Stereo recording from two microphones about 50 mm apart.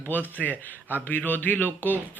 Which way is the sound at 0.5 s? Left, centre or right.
Right.